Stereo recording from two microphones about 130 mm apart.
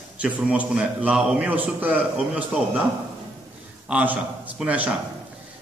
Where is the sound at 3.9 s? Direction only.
10° right (ahead or behind).